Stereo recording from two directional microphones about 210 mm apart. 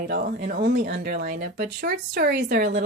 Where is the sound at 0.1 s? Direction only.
50° right (ahead or behind).